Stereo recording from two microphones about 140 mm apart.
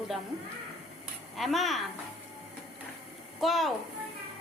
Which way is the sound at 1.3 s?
Centre (ahead or behind).